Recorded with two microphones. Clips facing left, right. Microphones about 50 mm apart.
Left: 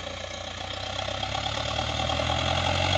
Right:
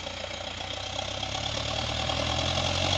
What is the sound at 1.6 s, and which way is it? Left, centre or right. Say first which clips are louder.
Vehicle: left 2 dB; centre.